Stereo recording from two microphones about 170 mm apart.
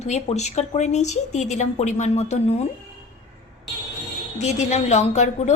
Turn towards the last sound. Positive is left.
turn(degrees=40)  # may be behind; listen again after turning